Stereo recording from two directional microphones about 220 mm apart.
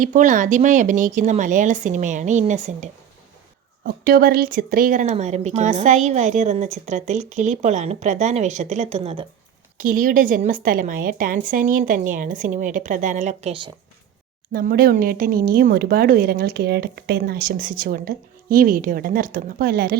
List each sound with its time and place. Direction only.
0.0 s speech: 35° right (ahead or behind)
9.7 s speech: 40° right (ahead or behind)
14.5 s speech: 40° right (ahead or behind)